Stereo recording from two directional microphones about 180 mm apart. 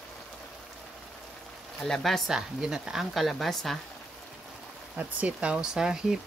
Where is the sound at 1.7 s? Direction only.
Centre (ahead or behind).